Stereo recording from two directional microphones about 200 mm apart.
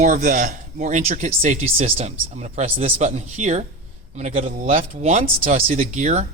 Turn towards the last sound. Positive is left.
turn(degrees=-35)  # may be behind; listen again after turning